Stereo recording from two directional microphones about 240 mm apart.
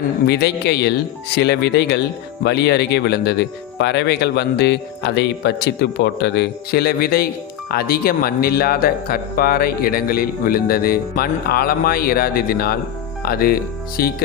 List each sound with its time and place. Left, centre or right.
0.3 s speech: left